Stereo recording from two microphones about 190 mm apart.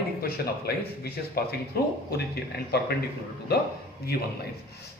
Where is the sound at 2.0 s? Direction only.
55° left (ahead or behind).